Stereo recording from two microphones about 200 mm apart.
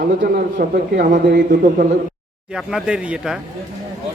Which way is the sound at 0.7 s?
50° right (ahead or behind).